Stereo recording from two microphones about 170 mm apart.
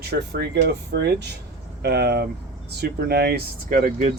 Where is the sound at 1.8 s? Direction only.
70° right (ahead or behind).